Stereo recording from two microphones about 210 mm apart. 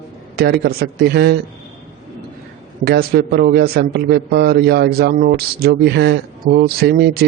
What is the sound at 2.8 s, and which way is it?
A man's voice, 50° right (ahead or behind).